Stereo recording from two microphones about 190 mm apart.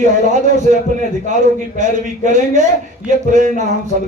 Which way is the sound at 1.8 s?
40° right (ahead or behind).